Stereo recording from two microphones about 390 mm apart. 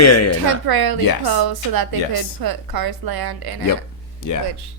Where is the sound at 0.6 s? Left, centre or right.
Right.